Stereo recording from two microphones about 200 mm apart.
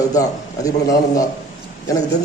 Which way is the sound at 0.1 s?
15° left (ahead or behind).